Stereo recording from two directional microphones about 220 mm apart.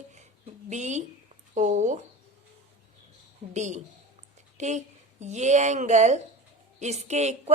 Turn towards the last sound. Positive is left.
turn(degrees=-30)  # may be behind; listen again after turning